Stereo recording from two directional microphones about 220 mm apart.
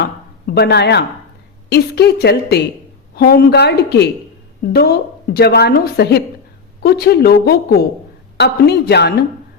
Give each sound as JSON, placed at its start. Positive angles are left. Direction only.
{"t": 0.0, "sound": "a woman's voice", "side_deg": 45}